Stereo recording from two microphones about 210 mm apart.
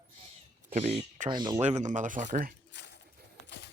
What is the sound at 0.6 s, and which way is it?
Speech, 30° right (ahead or behind).